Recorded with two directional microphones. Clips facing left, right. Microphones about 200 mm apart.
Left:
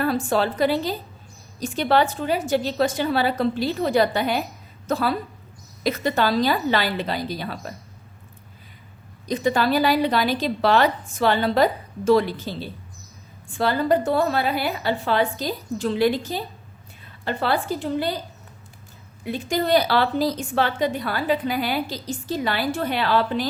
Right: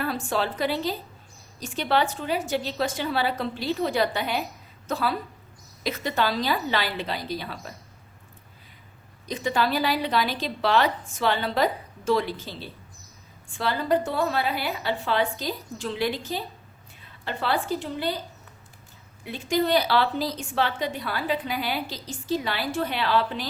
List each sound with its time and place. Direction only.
0.0 s a woman's voice: 40° left (ahead or behind)
9.2 s a woman's voice: 40° left (ahead or behind)
19.2 s a woman's voice: 45° left (ahead or behind)